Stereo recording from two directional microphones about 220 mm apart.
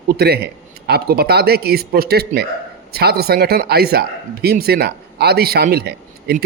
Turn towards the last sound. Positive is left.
turn(degrees=-45)  # may be behind; listen again after turning